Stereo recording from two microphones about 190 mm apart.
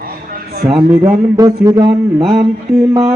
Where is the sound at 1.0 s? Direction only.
20° right (ahead or behind).